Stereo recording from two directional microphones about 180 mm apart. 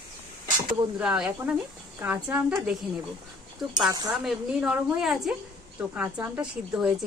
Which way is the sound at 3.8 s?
20° right (ahead or behind).